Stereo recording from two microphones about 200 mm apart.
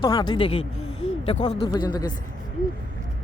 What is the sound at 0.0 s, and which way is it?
Speech, 20° left (ahead or behind).